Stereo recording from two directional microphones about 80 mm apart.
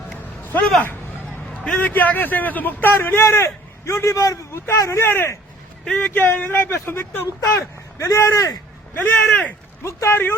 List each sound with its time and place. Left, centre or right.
1.6 s a man's voice: centre; by 8.5 s left
9.0 s a man's voice: left
9.8 s speech: left